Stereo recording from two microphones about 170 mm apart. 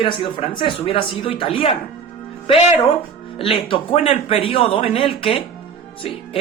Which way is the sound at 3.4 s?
30° left (ahead or behind).